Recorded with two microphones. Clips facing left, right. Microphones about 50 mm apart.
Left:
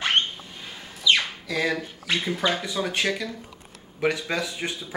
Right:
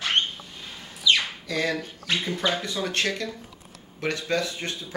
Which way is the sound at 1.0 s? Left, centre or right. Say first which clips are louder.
Left 1 dB; centre.